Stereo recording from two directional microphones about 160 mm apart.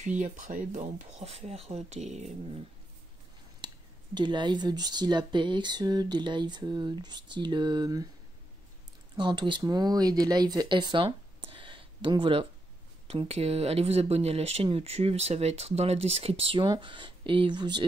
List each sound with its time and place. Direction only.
0.0 s speech: 50° right (ahead or behind)
3.6 s speech: 30° right (ahead or behind)
9.1 s speech: 30° right (ahead or behind)